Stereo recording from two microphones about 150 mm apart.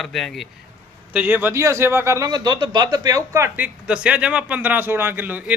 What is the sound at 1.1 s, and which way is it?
A man's voice, 10° right (ahead or behind).